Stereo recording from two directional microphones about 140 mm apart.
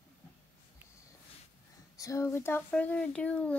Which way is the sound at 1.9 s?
20° left (ahead or behind).